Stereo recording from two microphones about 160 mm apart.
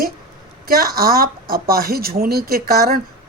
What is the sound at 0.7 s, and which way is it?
Speech, 70° right (ahead or behind).